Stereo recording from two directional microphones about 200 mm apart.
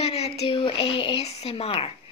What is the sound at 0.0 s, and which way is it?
Speech, 30° left (ahead or behind).